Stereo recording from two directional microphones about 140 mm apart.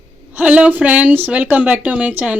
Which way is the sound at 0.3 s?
10° right (ahead or behind).